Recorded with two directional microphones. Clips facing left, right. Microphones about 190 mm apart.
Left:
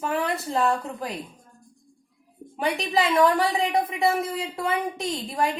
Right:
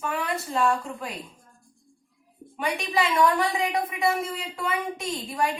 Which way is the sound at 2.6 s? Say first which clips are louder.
Left 2 dB; 30° left (ahead or behind).